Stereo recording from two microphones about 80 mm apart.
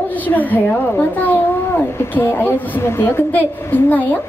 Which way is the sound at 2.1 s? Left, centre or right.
Left.